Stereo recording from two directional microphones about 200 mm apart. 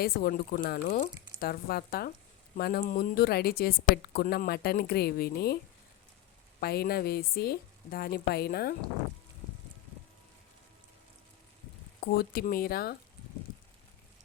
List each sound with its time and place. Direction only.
0.0 s speech: 50° left (ahead or behind)
6.6 s speech: 50° left (ahead or behind)
12.1 s speech: 50° left (ahead or behind)